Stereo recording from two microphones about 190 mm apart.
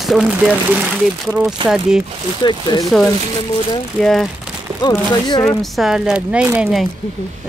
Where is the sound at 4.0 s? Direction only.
Centre (ahead or behind).